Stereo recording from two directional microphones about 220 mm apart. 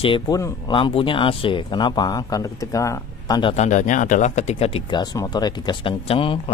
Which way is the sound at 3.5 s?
35° left (ahead or behind).